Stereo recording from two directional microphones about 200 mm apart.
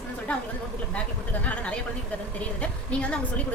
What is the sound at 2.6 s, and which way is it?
Speech, 5° left (ahead or behind).